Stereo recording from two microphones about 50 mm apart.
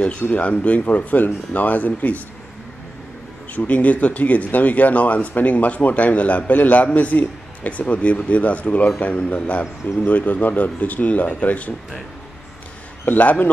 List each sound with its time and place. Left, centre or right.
0.2 s speech: left
3.5 s speech: left
13.1 s speech: left